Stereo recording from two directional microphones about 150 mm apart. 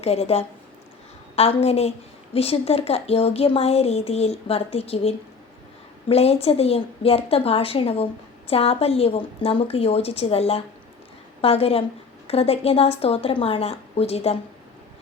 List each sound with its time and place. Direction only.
0.0 s a woman's voice: 45° left (ahead or behind)